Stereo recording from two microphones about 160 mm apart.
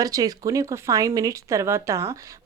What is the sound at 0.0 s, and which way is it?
Speech, 25° right (ahead or behind).